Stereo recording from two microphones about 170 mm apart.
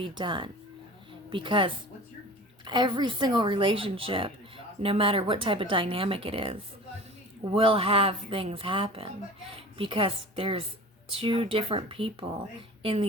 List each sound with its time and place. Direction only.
0.0 s speech: 30° right (ahead or behind)